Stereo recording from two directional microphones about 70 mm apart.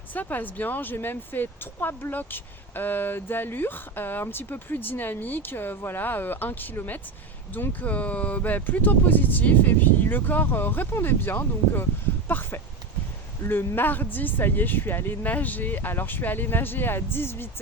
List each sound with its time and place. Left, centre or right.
0.1 s speech: left